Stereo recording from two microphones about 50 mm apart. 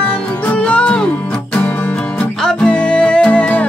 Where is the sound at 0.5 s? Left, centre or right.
Left.